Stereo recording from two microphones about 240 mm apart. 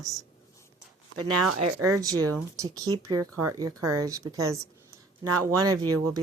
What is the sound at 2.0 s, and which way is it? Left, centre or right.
A woman's voice, centre.